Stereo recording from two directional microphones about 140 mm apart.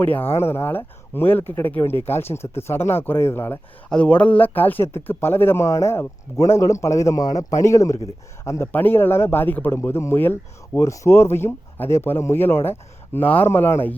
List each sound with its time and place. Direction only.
0.0 s speech: 15° left (ahead or behind)